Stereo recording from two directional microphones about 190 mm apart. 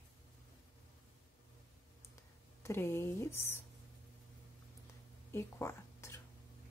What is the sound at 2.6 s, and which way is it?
Speech, 10° left (ahead or behind).